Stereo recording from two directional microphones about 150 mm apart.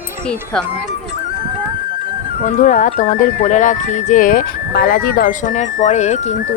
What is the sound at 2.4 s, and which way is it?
Speech, 60° left (ahead or behind).